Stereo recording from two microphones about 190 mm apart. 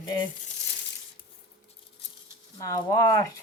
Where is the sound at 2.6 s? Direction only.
15° left (ahead or behind).